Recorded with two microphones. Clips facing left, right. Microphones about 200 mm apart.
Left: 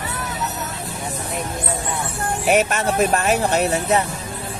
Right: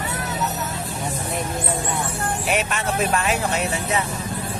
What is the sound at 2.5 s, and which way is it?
Speech, 45° left (ahead or behind).